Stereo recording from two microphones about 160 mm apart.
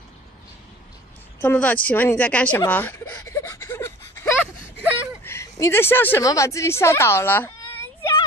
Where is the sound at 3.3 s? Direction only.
15° left (ahead or behind).